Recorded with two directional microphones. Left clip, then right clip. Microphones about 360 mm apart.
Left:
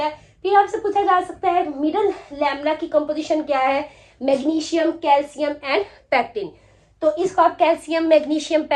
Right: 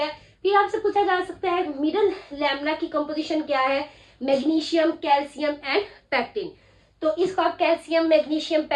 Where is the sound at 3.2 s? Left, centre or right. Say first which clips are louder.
Left 4 dB; centre.